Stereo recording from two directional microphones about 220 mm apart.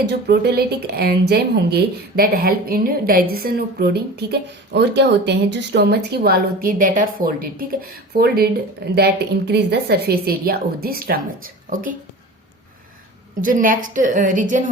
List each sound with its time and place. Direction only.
0.0 s speech: 50° right (ahead or behind)
13.4 s a woman's voice: 40° right (ahead or behind)